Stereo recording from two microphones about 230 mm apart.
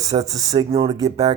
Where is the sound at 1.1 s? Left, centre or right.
Right.